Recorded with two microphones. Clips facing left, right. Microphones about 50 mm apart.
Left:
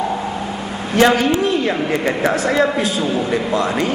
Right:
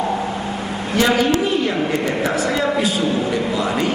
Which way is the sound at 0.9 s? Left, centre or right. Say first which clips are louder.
Left 4 dB; left.